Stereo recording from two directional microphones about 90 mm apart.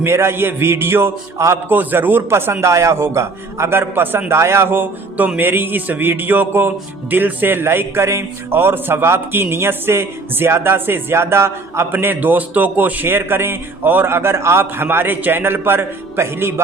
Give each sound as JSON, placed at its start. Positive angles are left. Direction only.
{"t": 0.0, "sound": "a man's voice", "side_deg": -30}